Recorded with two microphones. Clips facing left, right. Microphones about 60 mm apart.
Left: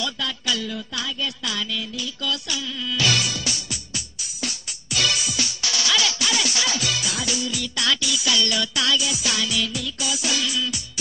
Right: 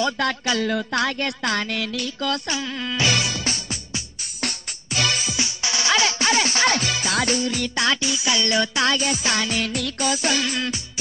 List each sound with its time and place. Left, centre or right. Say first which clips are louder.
0.2 s music: right 5 dB; right
3.0 s music: right 1 dB; right